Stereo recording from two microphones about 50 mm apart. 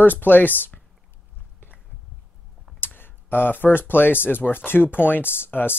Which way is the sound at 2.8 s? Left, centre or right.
Left.